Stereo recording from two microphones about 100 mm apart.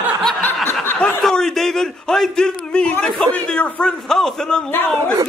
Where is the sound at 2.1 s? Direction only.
5° left (ahead or behind).